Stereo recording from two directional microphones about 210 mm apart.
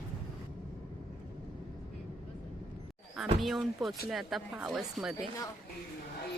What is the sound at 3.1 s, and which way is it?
Speech, centre (ahead or behind).